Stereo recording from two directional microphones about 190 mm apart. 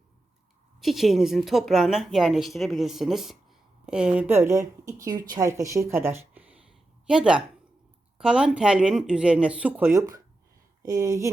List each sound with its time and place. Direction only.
0.8 s a woman's voice: centre (ahead or behind)